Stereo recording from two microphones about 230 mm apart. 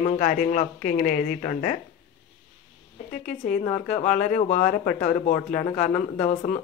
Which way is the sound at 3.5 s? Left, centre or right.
Left.